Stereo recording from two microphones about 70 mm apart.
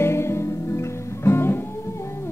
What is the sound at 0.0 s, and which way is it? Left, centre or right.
Music, left.